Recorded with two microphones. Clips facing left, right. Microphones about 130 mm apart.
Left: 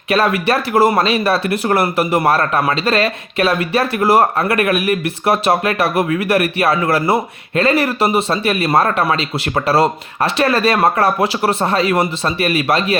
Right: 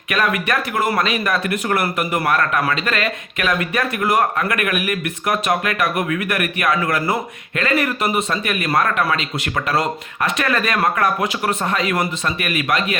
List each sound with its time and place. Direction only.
0.1 s speech: 30° left (ahead or behind)